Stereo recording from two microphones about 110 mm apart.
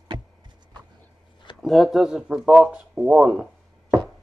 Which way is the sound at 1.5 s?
Centre (ahead or behind).